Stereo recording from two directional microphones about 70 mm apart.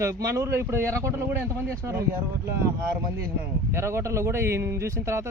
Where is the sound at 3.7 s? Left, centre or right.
Right.